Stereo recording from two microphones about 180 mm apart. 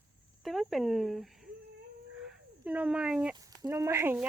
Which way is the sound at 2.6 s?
5° right (ahead or behind).